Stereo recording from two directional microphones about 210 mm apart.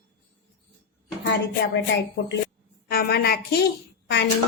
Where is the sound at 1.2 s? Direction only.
55° left (ahead or behind).